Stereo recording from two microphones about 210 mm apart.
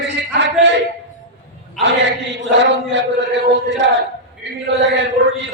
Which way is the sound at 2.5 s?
60° right (ahead or behind).